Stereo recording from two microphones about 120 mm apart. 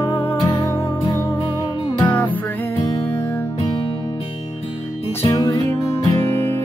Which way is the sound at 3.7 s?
45° left (ahead or behind).